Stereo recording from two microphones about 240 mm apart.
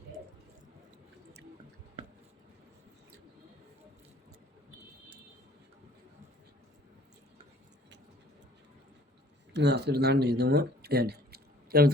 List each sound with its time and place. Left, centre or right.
9.5 s speech: right